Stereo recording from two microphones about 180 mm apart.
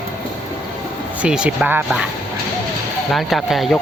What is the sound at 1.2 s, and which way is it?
Speech, 5° right (ahead or behind).